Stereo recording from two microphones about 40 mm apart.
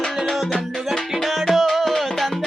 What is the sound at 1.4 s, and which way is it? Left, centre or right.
Music, centre.